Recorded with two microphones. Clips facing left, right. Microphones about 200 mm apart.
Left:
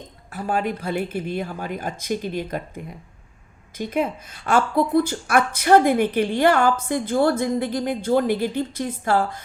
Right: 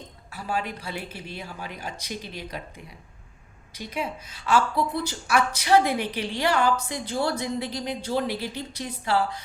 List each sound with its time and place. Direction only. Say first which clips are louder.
0.3 s speech: left 6 dB; 50° left (ahead or behind)